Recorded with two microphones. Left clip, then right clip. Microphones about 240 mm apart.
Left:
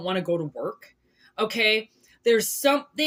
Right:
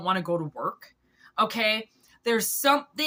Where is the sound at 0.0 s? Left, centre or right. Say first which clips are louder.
Even; centre.